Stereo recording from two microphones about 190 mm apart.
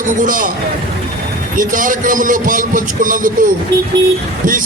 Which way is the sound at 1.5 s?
45° right (ahead or behind).